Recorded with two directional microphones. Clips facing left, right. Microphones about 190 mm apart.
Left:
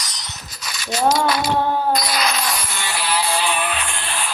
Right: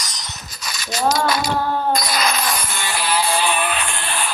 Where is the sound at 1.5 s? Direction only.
20° left (ahead or behind).